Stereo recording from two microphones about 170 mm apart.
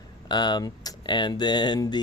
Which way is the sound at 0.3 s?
25° left (ahead or behind).